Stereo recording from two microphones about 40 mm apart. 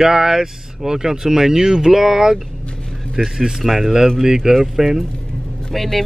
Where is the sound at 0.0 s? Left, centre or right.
Centre.